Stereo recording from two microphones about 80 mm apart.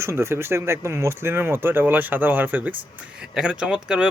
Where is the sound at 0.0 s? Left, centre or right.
Right.